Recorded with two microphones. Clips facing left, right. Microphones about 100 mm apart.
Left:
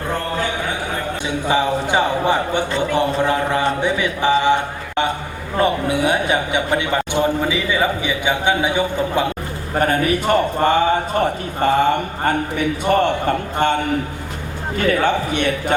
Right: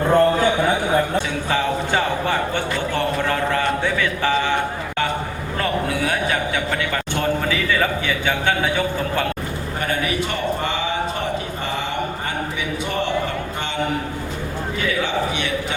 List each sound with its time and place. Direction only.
1.5 s a man's voice: 15° left (ahead or behind)
5.5 s a man's voice: 20° left (ahead or behind)
9.7 s a man's voice: 45° left (ahead or behind)
14.8 s a man's voice: 50° left (ahead or behind)